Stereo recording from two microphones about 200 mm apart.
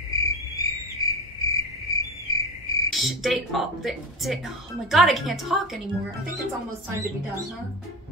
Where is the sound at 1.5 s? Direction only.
15° left (ahead or behind).